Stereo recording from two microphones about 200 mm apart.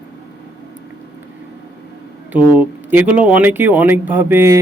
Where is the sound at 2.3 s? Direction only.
10° right (ahead or behind).